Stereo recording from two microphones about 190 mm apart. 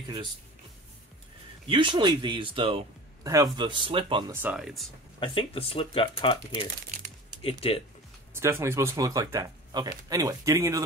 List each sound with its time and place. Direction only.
1.7 s speech: 25° right (ahead or behind)
4.3 s speech: 10° right (ahead or behind)
5.2 s speech: 30° left (ahead or behind)
8.3 s speech: 15° right (ahead or behind)